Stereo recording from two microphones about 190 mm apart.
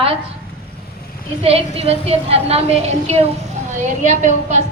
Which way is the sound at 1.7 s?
30° right (ahead or behind).